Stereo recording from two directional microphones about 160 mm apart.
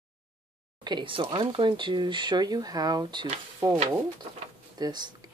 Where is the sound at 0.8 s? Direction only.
30° right (ahead or behind).